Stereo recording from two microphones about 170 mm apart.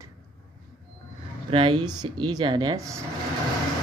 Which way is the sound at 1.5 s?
30° right (ahead or behind).